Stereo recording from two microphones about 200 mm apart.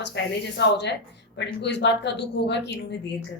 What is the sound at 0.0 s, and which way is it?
Speech, 60° left (ahead or behind).